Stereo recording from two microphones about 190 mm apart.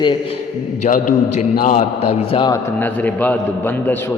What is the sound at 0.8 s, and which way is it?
A man's voice, 40° left (ahead or behind).